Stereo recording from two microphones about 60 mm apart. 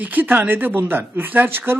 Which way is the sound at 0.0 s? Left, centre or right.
Right.